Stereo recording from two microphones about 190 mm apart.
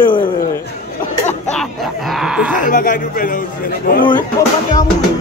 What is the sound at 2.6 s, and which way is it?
Speech, 45° left (ahead or behind).